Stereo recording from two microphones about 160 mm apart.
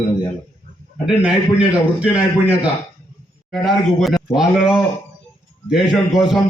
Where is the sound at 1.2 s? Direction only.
5° right (ahead or behind).